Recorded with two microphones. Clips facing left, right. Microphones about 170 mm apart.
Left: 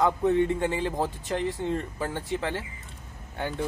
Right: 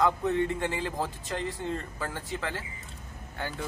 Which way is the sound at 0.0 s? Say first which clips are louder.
Left 3 dB; 25° left (ahead or behind).